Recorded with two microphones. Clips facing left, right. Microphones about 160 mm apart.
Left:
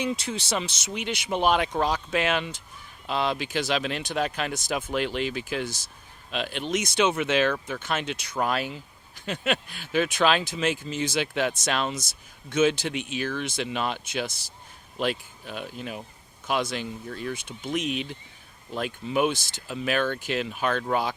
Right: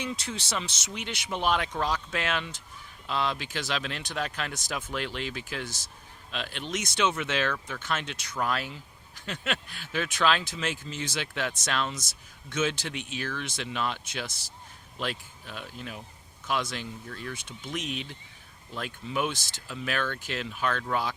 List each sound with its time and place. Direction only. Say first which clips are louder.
0.0 s speech: left 6 dB; 15° left (ahead or behind)